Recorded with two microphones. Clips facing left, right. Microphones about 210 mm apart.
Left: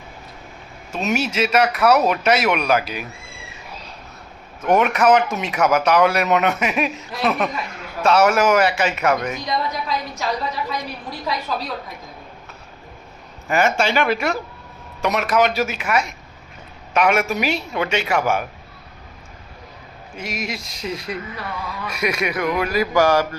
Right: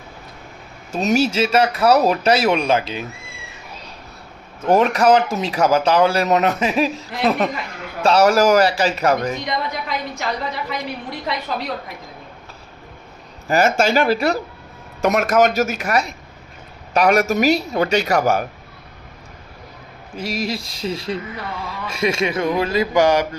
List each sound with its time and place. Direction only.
0.9 s speech: 35° right (ahead or behind)
4.6 s speech: 30° right (ahead or behind)
13.5 s speech: 40° right (ahead or behind)
15.0 s speech: 45° right (ahead or behind)
20.1 s speech: 35° right (ahead or behind)